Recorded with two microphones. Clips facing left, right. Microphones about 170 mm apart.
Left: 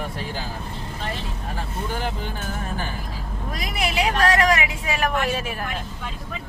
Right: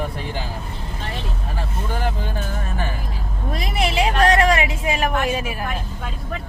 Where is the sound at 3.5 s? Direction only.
30° right (ahead or behind); by 5.6 s 10° right (ahead or behind).